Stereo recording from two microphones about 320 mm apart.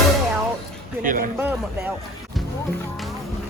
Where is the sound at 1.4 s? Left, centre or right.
Centre.